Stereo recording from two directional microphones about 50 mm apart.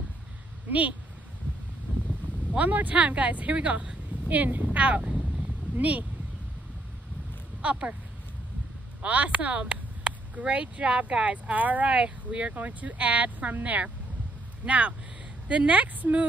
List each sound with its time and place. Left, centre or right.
0.7 s speech: right
2.5 s speech: right
7.6 s speech: right
9.0 s speech: right
12.0 s speech: right